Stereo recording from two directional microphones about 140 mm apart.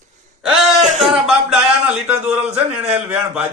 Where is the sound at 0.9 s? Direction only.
5° right (ahead or behind).